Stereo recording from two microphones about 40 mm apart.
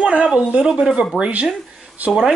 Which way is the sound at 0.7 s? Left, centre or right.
Centre.